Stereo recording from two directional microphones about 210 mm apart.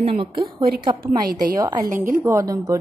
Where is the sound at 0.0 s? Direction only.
25° right (ahead or behind).